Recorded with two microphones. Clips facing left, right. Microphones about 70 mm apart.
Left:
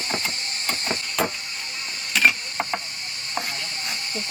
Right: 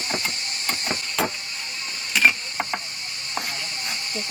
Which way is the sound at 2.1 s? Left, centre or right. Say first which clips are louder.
Even; centre.